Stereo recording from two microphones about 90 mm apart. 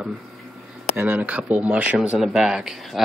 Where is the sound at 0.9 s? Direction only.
20° right (ahead or behind).